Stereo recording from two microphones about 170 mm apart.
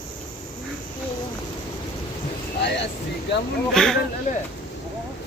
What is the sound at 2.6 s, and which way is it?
Speech, 90° left.